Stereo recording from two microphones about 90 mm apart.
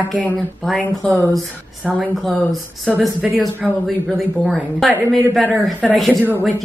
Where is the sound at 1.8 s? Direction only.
10° right (ahead or behind).